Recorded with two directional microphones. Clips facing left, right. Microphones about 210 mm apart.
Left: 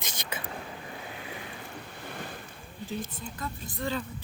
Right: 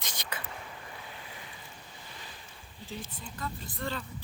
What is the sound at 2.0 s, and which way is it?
Boat, 60° left (ahead or behind).